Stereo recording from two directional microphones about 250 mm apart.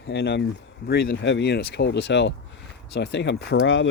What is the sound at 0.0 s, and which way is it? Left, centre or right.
Speech, left.